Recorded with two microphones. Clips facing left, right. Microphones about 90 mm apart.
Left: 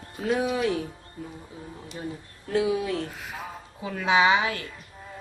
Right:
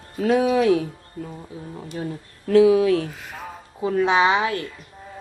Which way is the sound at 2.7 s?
90° right.